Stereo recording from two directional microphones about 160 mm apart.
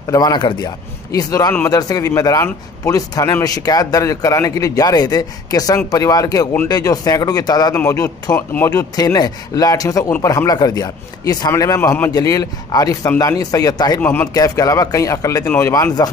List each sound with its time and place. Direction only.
0.1 s a man's voice: 25° left (ahead or behind)
14.0 s speech: 10° left (ahead or behind)
14.3 s a man's voice: 20° left (ahead or behind)
15.4 s speech: 10° left (ahead or behind)
15.7 s a man's voice: 25° left (ahead or behind)